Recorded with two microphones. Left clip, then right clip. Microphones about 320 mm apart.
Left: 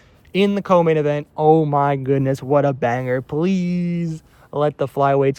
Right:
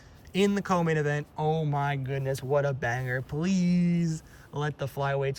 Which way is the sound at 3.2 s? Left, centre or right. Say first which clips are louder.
Left 10 dB; centre.